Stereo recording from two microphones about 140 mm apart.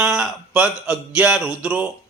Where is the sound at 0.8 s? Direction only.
10° right (ahead or behind).